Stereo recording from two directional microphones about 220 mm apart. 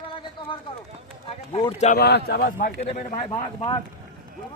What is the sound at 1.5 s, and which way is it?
Speech, 30° left (ahead or behind).